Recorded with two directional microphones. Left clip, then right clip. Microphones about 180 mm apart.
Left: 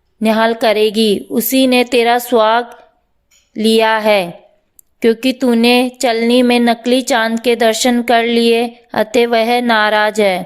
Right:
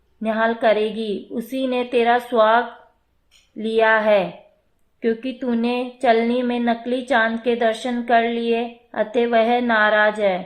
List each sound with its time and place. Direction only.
0.2 s speech: 35° left (ahead or behind)